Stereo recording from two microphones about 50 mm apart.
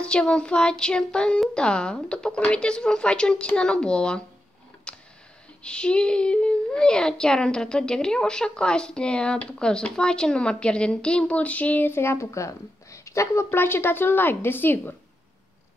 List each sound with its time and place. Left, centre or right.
0.0 s speech: centre
4.9 s a sound: centre
5.6 s speech: centre
11.9 s a woman's voice: left